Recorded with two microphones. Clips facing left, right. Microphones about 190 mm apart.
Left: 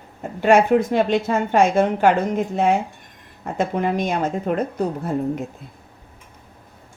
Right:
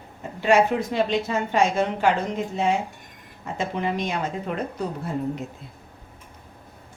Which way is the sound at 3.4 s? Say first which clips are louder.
Left 5 dB; 50° left (ahead or behind).